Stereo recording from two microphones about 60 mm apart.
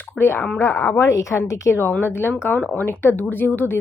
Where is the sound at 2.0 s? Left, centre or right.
Left.